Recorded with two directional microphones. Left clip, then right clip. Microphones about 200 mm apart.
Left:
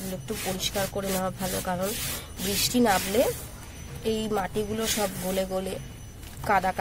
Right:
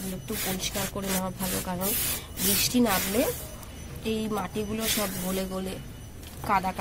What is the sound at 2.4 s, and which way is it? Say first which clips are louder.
Speech: left 2 dB; 20° left (ahead or behind).